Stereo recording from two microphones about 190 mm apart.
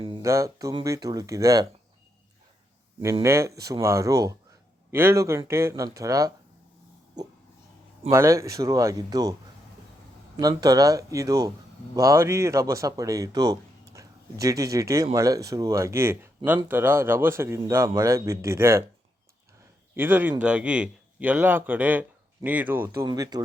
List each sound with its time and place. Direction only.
0.0 s a sound: 25° right (ahead or behind)
0.3 s speech: 15° right (ahead or behind)
3.2 s speech: 15° right (ahead or behind)
8.1 s speech: 15° right (ahead or behind)
10.3 s speech: 20° right (ahead or behind)
19.9 s a man's voice: 10° right (ahead or behind)